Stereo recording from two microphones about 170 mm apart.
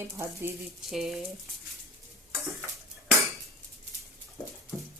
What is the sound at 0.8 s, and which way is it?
Speech, centre (ahead or behind).